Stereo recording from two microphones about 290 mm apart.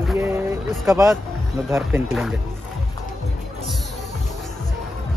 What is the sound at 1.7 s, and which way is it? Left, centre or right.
Speech, centre.